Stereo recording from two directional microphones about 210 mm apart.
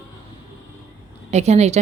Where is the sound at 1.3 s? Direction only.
30° right (ahead or behind).